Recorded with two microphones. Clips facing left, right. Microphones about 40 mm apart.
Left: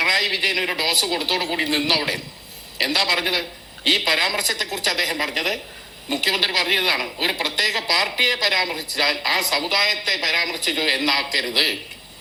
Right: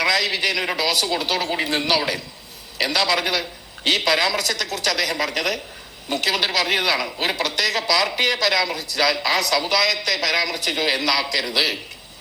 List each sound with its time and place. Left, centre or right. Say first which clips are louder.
0.0 s a woman's voice: even; centre